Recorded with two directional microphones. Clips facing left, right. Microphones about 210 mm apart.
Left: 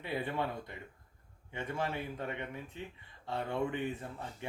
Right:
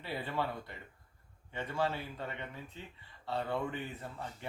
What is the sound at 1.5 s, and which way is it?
Speech, 15° left (ahead or behind).